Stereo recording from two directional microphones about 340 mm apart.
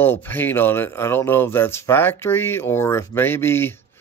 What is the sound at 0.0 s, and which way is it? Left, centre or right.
Speech, centre.